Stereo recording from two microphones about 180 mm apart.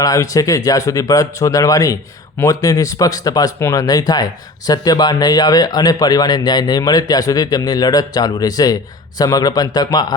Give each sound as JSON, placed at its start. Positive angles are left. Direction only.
{"t": 0.0, "sound": "speech", "side_deg": 20}